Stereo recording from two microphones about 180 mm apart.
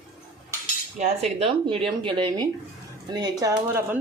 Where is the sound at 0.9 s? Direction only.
35° right (ahead or behind).